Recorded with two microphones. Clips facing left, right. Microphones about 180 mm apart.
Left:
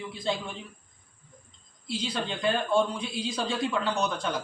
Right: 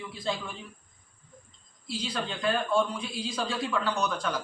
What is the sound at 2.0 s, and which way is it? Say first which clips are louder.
A man's voice: left 1 dB; 25° left (ahead or behind).